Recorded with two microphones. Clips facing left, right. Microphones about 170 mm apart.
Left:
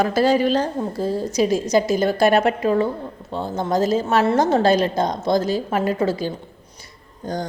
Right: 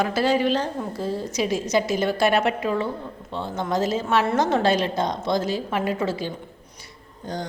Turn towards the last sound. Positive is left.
turn(degrees=40)  # may be behind; listen again after turning